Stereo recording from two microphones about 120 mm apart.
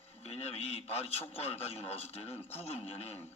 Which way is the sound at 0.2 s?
60° left (ahead or behind).